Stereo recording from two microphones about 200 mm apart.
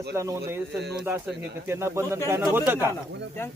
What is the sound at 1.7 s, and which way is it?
Speech, 15° right (ahead or behind).